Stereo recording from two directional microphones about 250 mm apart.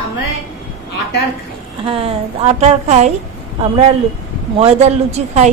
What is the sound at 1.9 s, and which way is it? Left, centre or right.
A woman's voice, right.